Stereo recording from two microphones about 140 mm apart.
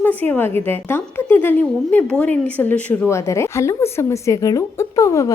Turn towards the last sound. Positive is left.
turn(degrees=25)  # may be behind; listen again after turning